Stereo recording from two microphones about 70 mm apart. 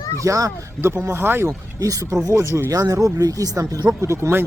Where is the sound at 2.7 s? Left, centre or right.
Right.